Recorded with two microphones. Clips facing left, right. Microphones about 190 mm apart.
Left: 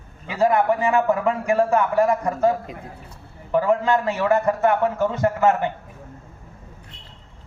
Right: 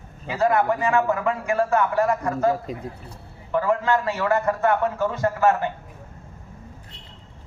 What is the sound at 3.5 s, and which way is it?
A man's voice, 20° left (ahead or behind).